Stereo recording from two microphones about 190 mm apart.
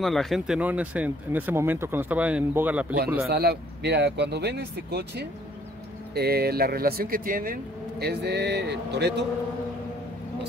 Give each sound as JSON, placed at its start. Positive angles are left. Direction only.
{"t": 0.0, "sound": "speech", "side_deg": 0}
{"t": 3.3, "sound": "speech", "side_deg": -55}
{"t": 8.0, "sound": "speech", "side_deg": -60}